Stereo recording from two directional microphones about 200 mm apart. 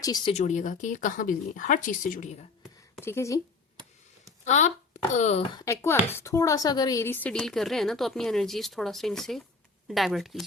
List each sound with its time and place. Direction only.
0.0 s speech: 20° left (ahead or behind)
0.3 s speech: 35° left (ahead or behind)
3.0 s a woman's voice: 15° left (ahead or behind)
4.4 s speech: 35° left (ahead or behind)
5.5 s a woman's voice: 15° left (ahead or behind)